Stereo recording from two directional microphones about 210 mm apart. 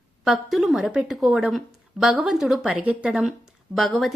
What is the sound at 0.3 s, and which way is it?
A woman's voice, centre (ahead or behind).